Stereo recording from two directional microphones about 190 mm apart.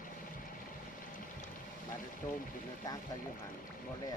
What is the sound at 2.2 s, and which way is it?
Speech, 20° left (ahead or behind).